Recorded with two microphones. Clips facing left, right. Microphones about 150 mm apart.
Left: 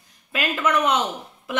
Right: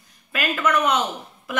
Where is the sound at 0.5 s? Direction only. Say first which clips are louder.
Even; 15° left (ahead or behind).